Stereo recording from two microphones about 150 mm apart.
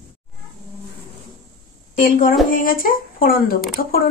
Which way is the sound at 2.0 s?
60° left (ahead or behind).